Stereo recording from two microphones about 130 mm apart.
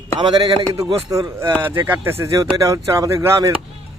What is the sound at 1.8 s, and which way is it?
Speech, 15° right (ahead or behind).